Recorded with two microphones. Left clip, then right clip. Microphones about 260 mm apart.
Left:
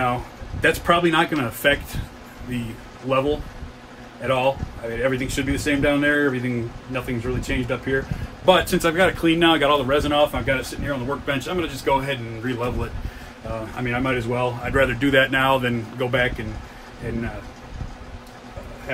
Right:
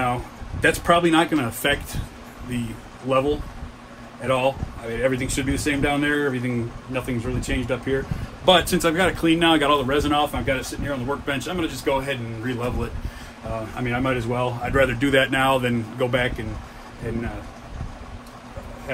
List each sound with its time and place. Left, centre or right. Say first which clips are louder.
0.0 s speech: left 1 dB; centre
3.1 s speech: even; right